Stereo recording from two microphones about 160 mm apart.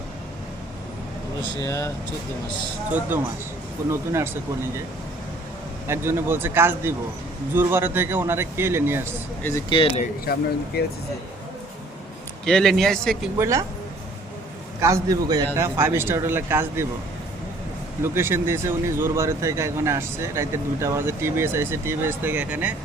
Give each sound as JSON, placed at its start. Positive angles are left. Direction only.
{"t": 1.6, "sound": "speech", "side_deg": 20}
{"t": 3.8, "sound": "speech", "side_deg": -15}
{"t": 5.9, "sound": "speech", "side_deg": -15}
{"t": 9.6, "sound": "speech", "side_deg": 35}
{"t": 12.5, "sound": "a man's voice", "side_deg": 0}
{"t": 13.4, "sound": "a man's voice", "side_deg": -20}
{"t": 14.8, "sound": "a man's voice", "side_deg": -20}
{"t": 18.0, "sound": "speech", "side_deg": -15}